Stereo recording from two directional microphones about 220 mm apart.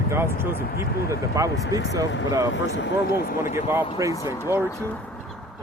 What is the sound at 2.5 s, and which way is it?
Speech, 55° left (ahead or behind).